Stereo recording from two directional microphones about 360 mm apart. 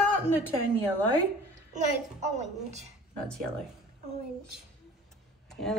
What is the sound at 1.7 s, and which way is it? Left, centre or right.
Speech, centre.